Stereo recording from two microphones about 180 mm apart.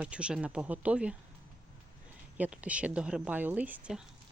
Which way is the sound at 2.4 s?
5° right (ahead or behind).